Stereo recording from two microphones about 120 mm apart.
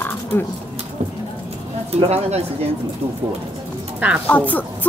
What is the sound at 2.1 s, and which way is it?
Speech, 65° right (ahead or behind).